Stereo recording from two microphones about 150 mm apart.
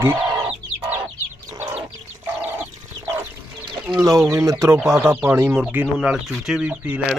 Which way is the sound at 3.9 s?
20° right (ahead or behind).